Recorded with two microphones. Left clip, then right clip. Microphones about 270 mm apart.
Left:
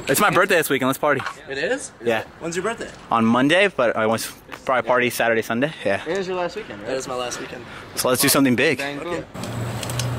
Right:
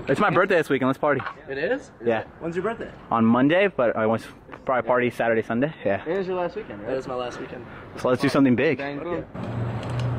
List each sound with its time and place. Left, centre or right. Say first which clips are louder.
0.2 s speech: left 3 dB; centre
8.0 s speech: left 3 dB; centre
9.5 s vehicle: left 3 dB; right